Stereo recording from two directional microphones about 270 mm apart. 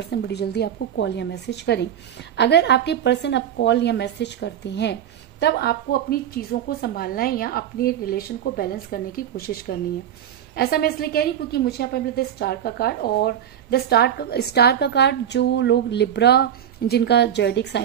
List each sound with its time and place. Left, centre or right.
0.1 s a woman's voice: left